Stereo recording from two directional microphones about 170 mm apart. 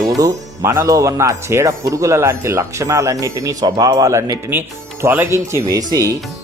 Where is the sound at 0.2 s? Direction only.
20° right (ahead or behind).